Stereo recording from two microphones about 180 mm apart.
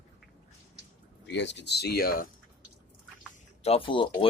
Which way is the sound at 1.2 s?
75° left (ahead or behind).